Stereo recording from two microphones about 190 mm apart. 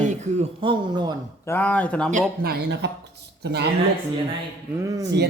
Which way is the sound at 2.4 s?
55° right (ahead or behind).